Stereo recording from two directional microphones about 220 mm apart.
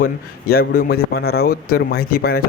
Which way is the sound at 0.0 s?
45° left (ahead or behind).